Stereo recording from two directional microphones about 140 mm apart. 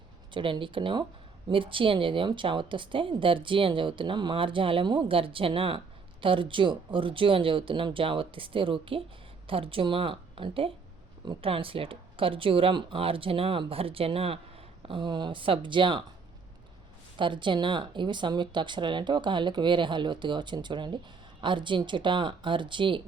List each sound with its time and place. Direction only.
0.3 s speech: 35° right (ahead or behind)
17.2 s speech: 35° right (ahead or behind)